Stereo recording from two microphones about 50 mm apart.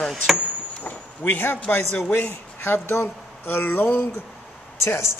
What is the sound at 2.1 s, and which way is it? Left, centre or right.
Speech, left.